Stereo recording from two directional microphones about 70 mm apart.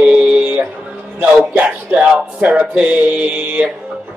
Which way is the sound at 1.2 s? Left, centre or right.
Centre.